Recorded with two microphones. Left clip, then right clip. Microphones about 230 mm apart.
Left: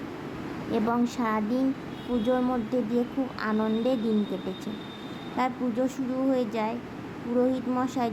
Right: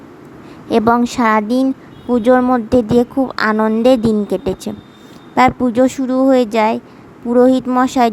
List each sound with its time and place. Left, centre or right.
0.7 s speech: right